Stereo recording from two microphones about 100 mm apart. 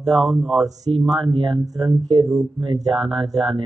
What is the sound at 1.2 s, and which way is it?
Speech, 55° right (ahead or behind).